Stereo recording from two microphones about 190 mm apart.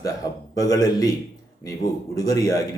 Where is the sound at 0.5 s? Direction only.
20° left (ahead or behind).